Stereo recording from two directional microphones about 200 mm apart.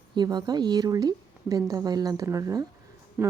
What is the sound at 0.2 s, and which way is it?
A woman's voice, 20° right (ahead or behind).